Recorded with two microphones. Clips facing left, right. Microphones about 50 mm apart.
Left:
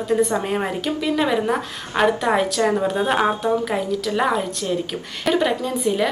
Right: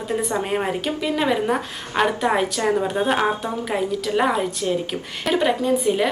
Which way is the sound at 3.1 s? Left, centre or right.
Centre.